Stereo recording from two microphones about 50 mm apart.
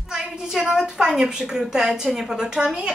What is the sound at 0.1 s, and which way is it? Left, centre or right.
A woman's voice, centre.